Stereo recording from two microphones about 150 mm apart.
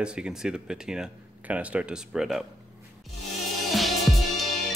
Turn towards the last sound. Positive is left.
turn(degrees=0)  # may be behind; listen again after turning